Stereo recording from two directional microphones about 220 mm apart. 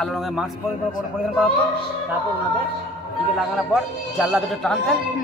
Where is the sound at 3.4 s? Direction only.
Centre (ahead or behind).